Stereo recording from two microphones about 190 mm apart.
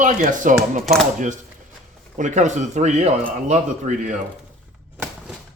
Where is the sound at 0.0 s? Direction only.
45° right (ahead or behind).